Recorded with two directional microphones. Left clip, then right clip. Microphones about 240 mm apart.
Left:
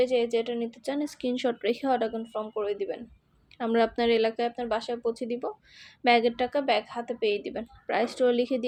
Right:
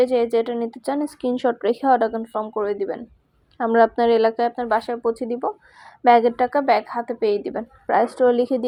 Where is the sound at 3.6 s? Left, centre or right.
Centre.